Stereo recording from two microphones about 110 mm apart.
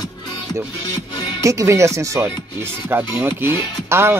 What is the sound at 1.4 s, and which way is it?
Speech, 30° right (ahead or behind).